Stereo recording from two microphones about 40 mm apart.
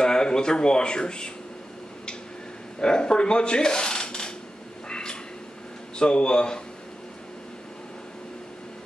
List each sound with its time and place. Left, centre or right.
0.0 s speech: centre
2.8 s speech: left
4.8 s a sound: left
5.9 s speech: left